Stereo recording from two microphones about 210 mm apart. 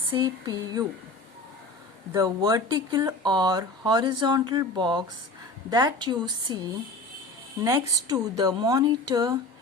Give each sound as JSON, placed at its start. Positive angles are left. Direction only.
{"t": 0.1, "sound": "speech", "side_deg": -20}
{"t": 2.1, "sound": "speech", "side_deg": -20}